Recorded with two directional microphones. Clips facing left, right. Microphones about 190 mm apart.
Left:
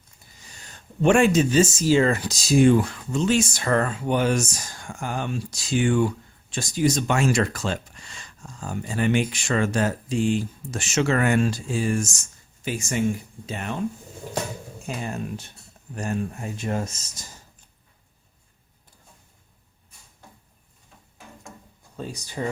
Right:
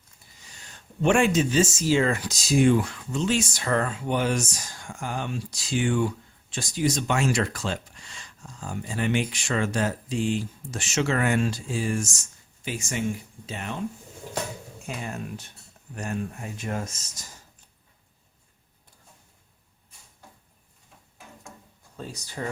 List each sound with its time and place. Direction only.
1.0 s speech: 40° left (ahead or behind)
14.8 s speech: 30° left (ahead or behind)
21.9 s speech: 15° left (ahead or behind)